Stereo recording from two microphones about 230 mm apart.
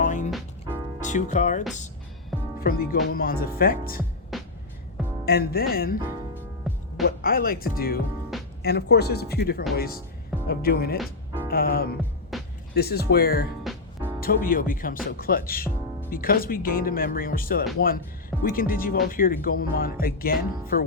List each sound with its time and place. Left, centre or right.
0.0 s music: left
0.3 s music: centre
1.0 s speech: left
4.3 s music: centre
5.2 s speech: left
6.7 s music: centre
7.2 s speech: left
10.9 s music: centre
11.4 s speech: left
12.3 s music: centre
12.7 s speech: left